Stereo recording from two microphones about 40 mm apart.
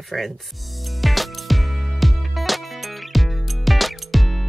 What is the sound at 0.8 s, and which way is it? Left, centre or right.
Music, centre.